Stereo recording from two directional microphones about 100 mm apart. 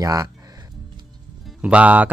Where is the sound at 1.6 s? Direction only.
15° right (ahead or behind).